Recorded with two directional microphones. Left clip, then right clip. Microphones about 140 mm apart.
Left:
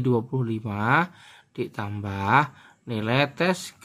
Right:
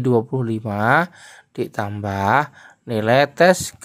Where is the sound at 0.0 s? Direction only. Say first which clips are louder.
Right 6 dB; 45° right (ahead or behind).